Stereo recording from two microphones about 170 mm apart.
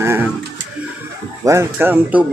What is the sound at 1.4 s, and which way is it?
Speech, 15° right (ahead or behind).